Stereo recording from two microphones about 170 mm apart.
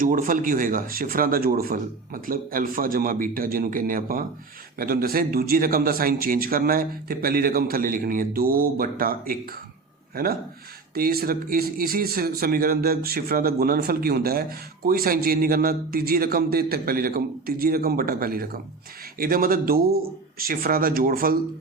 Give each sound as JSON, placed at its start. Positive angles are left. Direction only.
{"t": 0.0, "sound": "a man's voice", "side_deg": -55}
{"t": 10.9, "sound": "a man's voice", "side_deg": -60}